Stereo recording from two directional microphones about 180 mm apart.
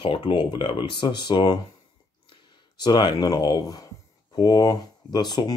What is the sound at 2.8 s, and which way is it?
Speech, 25° left (ahead or behind).